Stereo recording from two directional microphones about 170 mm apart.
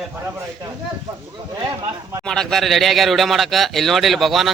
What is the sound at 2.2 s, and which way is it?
Speech, 5° left (ahead or behind).